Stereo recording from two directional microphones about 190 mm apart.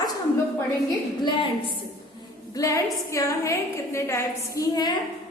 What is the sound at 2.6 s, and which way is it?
A woman's voice, 15° left (ahead or behind).